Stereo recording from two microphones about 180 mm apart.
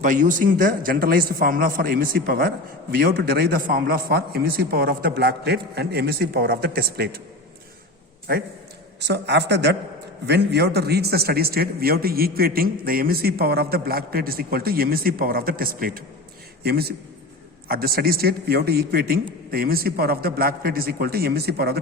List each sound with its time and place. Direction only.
0.0 s a man's voice: 45° right (ahead or behind)
9.0 s a man's voice: 70° right (ahead or behind)